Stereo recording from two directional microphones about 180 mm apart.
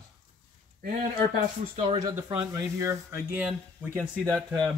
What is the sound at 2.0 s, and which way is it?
Speech, 20° right (ahead or behind).